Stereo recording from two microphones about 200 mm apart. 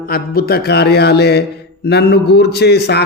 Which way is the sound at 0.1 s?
50° left (ahead or behind).